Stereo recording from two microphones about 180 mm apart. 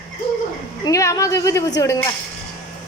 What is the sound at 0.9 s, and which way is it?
Speech, 20° left (ahead or behind).